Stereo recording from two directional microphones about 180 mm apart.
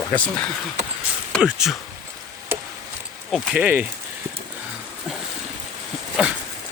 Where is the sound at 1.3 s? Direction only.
5° right (ahead or behind).